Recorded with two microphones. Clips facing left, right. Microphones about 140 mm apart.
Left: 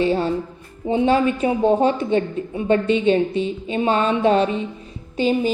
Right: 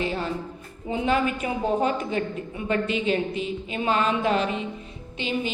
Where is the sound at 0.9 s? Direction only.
30° left (ahead or behind).